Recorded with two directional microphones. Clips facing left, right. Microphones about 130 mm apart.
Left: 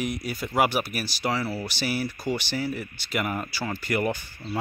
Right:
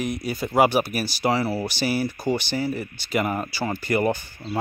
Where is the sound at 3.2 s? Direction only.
35° right (ahead or behind).